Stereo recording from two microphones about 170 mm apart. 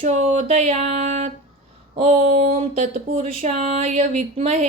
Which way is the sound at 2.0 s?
45° right (ahead or behind).